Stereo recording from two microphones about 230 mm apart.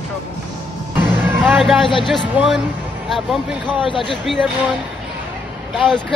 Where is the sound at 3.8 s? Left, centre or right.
Left.